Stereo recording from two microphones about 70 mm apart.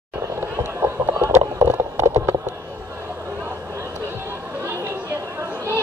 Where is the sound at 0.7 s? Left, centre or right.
Right.